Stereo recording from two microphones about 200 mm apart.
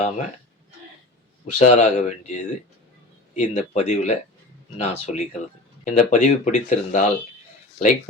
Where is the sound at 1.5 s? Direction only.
35° left (ahead or behind).